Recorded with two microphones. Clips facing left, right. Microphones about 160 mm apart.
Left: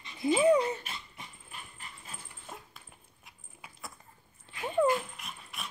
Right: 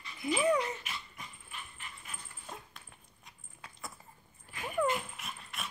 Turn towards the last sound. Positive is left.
turn(degrees=0)  # may be behind; listen again after turning